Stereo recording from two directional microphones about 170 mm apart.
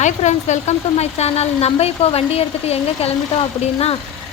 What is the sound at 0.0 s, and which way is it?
A woman's voice, 45° left (ahead or behind).